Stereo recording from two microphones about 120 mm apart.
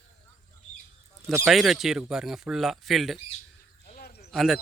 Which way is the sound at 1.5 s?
Centre (ahead or behind).